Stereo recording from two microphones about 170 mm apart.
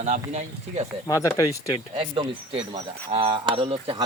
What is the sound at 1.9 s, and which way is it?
Speech, 30° right (ahead or behind).